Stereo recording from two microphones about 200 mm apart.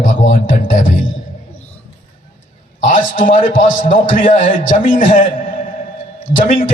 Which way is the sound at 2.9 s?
45° left (ahead or behind).